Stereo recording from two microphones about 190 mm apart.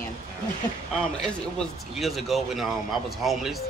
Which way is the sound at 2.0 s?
Centre (ahead or behind).